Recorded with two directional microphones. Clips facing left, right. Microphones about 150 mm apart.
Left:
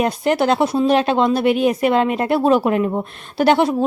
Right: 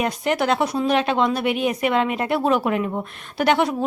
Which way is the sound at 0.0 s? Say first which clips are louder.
Left 4 dB; 35° left (ahead or behind).